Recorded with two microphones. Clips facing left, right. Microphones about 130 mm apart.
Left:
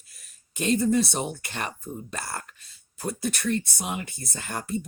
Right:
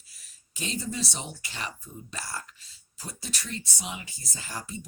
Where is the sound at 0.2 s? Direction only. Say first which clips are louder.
Left 7 dB; 55° left (ahead or behind).